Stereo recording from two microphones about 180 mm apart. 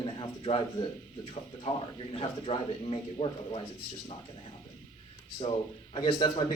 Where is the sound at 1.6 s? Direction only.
30° left (ahead or behind).